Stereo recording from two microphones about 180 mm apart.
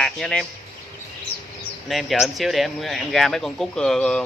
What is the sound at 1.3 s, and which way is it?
Bird, 60° left (ahead or behind).